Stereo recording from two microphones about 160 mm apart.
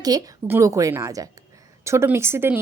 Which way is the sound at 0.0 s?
25° right (ahead or behind).